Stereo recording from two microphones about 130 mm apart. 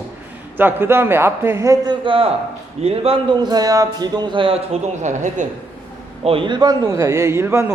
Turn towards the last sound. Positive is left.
turn(degrees=-20)  # may be behind; listen again after turning